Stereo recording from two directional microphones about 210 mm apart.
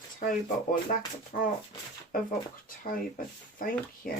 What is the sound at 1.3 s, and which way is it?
Speech, 40° left (ahead or behind).